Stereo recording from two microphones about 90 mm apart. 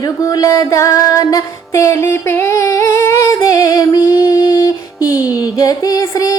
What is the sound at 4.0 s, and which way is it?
Female singing, 45° left (ahead or behind).